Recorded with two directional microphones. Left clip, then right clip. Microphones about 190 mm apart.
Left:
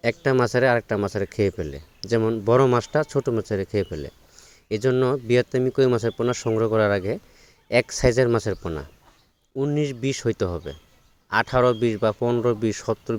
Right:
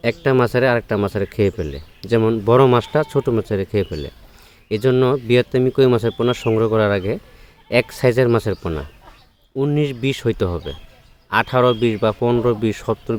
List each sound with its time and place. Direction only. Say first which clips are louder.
0.0 s speech: right 4 dB; 35° left (ahead or behind)